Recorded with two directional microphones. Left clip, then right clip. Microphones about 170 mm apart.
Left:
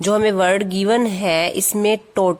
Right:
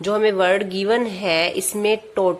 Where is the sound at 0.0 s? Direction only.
45° left (ahead or behind).